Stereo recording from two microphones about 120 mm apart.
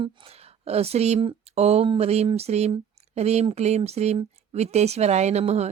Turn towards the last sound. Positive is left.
turn(degrees=-65)  # may be behind; listen again after turning